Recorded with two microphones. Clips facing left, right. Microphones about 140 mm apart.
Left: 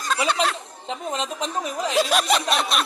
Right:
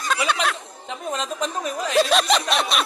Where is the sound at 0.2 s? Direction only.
25° left (ahead or behind).